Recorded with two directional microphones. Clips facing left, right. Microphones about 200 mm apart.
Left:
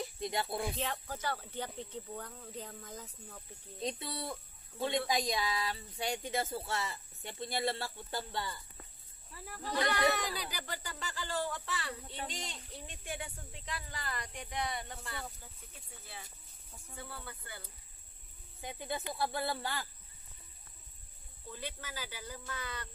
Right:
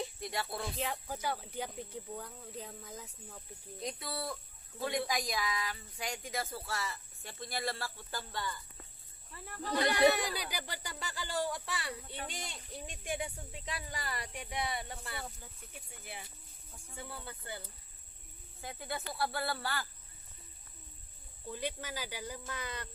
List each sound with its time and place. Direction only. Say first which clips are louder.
0.2 s speech: left 3 dB; 20° left (ahead or behind)
1.0 s speech: right 1 dB; 10° right (ahead or behind)
3.8 s speech: left 1 dB; 25° left (ahead or behind)
9.3 s speech: even; 5° left (ahead or behind)
9.8 s speech: right 5 dB; 10° right (ahead or behind)
18.6 s speech: left 2 dB; 20° left (ahead or behind)
21.5 s speech: right 5 dB; 15° right (ahead or behind)